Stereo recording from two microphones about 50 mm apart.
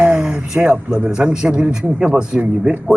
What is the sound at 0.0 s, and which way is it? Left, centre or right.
A man's voice, centre.